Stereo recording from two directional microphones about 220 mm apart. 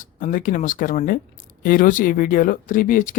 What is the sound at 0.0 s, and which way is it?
Speech, 35° left (ahead or behind).